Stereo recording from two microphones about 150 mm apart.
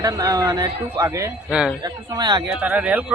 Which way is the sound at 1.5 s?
5° right (ahead or behind).